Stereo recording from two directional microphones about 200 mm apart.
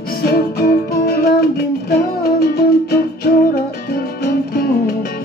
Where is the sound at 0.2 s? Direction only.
50° left (ahead or behind).